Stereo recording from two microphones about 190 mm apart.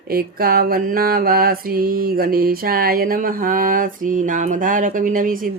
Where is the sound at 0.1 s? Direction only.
50° right (ahead or behind).